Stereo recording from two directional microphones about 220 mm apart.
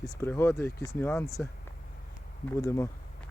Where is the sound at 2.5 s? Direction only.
15° left (ahead or behind).